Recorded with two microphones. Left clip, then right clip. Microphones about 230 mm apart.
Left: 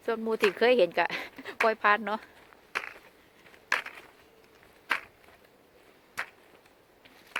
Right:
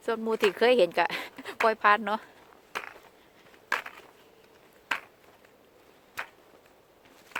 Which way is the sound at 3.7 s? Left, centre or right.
Centre.